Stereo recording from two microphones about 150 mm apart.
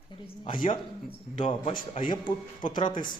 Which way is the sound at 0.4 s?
35° left (ahead or behind).